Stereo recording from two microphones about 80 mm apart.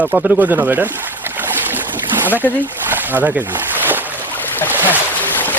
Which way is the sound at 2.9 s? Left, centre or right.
Right.